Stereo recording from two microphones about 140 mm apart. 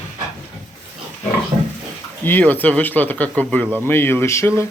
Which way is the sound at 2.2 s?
15° left (ahead or behind).